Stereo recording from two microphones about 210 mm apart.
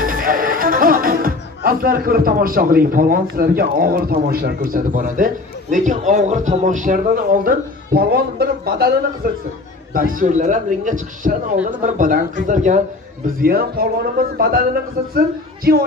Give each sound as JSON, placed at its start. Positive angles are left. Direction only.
{"t": 0.0, "sound": "music", "side_deg": -40}
{"t": 10.1, "sound": "a man's voice", "side_deg": -35}
{"t": 13.4, "sound": "music", "side_deg": -45}